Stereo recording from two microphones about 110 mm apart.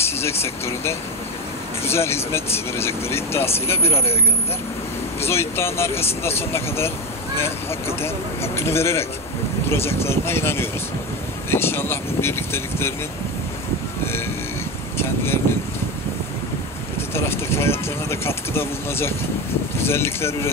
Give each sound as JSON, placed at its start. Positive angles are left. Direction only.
{"t": 0.0, "sound": "speech", "side_deg": 25}
{"t": 5.2, "sound": "speech", "side_deg": 25}
{"t": 8.0, "sound": "speech", "side_deg": 20}
{"t": 15.0, "sound": "speech", "side_deg": 20}
{"t": 17.1, "sound": "speech", "side_deg": 25}